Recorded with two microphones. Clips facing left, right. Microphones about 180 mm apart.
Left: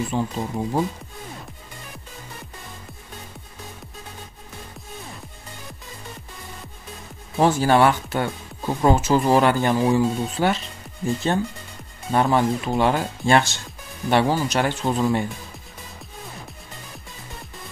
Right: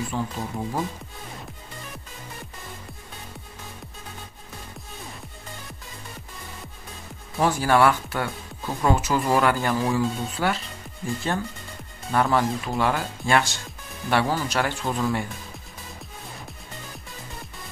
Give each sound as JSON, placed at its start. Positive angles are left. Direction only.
{"t": 0.1, "sound": "speech", "side_deg": 15}
{"t": 7.3, "sound": "speech", "side_deg": 25}
{"t": 12.1, "sound": "speech", "side_deg": 20}